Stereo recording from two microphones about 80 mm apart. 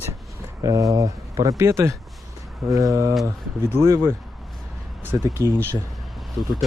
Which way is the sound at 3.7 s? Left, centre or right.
Right.